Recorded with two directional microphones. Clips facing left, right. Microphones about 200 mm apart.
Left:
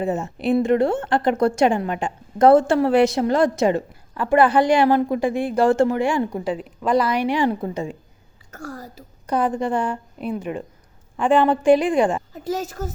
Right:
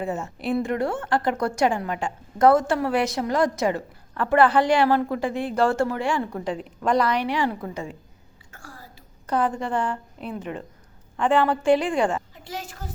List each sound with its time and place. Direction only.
0.0 s a woman's voice: 20° left (ahead or behind)
4.1 s a woman's voice: 10° left (ahead or behind)
8.5 s a sound: 40° left (ahead or behind)
9.2 s a woman's voice: 15° left (ahead or behind)
12.3 s a woman's voice: 40° left (ahead or behind)